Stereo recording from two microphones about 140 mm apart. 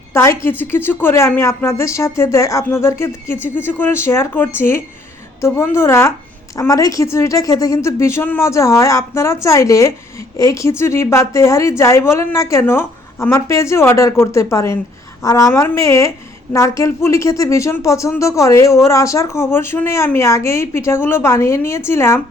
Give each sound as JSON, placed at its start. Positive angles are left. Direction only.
{"t": 0.1, "sound": "a woman's voice", "side_deg": 20}